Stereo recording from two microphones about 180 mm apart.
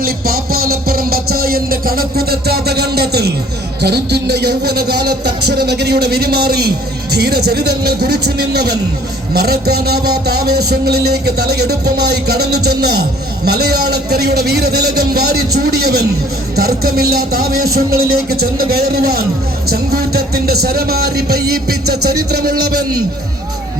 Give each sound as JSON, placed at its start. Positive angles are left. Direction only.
{"t": 0.0, "sound": "a man's voice", "side_deg": -55}